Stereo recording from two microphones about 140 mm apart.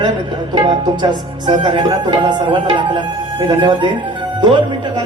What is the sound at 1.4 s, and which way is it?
Speech, 35° right (ahead or behind).